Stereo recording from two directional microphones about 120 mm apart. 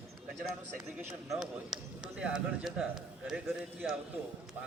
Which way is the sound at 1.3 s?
5° right (ahead or behind).